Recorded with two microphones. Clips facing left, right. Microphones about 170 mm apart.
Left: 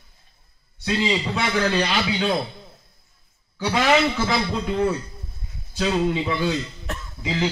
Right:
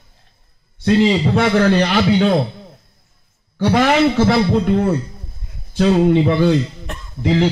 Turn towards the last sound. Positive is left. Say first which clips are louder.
# right 9 dB
turn(degrees=-60)  # may be behind; listen again after turning